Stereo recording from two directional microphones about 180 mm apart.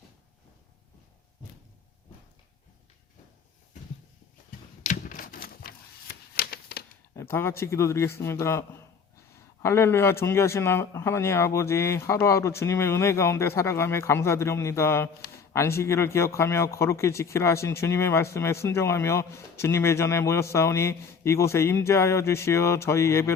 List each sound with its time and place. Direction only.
4.8 s a sound: 45° left (ahead or behind)
7.2 s speech: 15° left (ahead or behind)
9.6 s speech: 15° left (ahead or behind)